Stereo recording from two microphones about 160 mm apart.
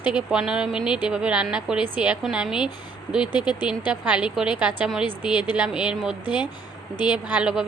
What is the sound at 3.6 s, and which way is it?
A woman's voice, 10° right (ahead or behind).